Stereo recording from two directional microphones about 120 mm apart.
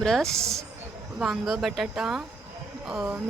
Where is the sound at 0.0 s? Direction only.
5° left (ahead or behind).